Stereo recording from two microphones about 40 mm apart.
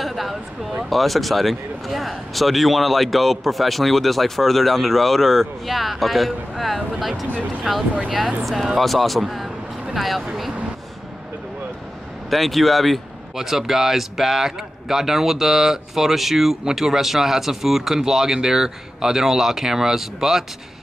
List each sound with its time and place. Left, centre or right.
0.0 s a sound: centre
0.8 s a man's voice: centre
12.3 s a man's voice: centre